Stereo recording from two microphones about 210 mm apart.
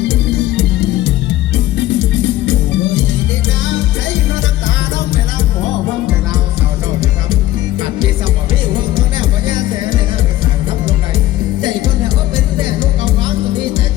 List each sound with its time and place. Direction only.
0.1 s music: 55° left (ahead or behind)